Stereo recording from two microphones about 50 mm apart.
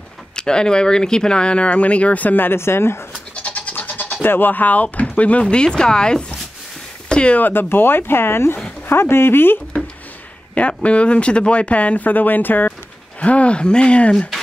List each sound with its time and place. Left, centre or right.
0.4 s speech: centre; by 2.6 s left
2.6 s speech: left
3.1 s speech: left
7.1 s a sound: centre
7.3 s speech: left
10.5 s speech: left
13.2 s speech: left